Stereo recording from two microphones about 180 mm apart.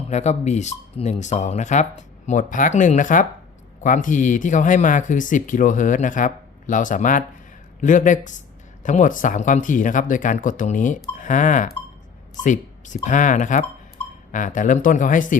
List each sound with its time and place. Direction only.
0.1 s speech: 40° left (ahead or behind)